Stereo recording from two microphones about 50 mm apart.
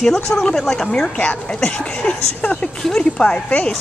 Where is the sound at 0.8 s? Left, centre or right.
Centre.